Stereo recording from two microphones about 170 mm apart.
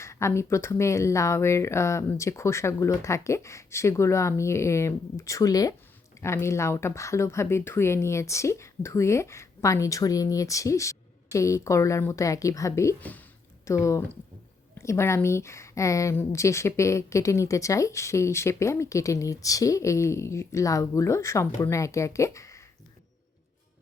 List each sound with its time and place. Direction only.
0.0 s a woman's voice: 15° left (ahead or behind)